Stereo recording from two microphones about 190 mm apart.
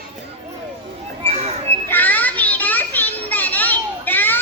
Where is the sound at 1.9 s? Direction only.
10° left (ahead or behind).